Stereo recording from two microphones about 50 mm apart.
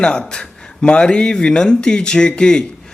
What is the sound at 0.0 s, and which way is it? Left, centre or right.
A man's voice, centre.